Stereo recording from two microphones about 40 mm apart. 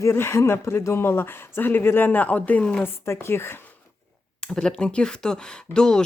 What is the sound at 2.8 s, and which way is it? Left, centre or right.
Speech, left.